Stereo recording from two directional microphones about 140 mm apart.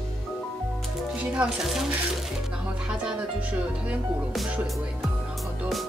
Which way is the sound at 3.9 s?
10° right (ahead or behind).